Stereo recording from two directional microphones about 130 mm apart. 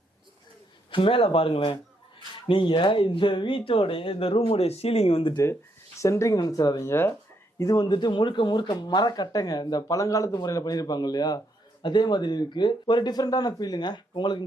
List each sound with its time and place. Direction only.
0.9 s a man's voice: 40° left (ahead or behind)
6.0 s a man's voice: 25° left (ahead or behind)